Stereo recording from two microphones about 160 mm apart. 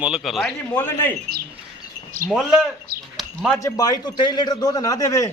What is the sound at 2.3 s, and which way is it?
Speech, centre (ahead or behind).